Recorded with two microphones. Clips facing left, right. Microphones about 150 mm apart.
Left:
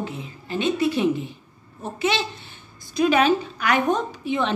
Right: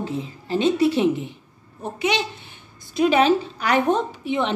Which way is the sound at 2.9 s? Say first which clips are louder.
Right 1 dB; 25° right (ahead or behind).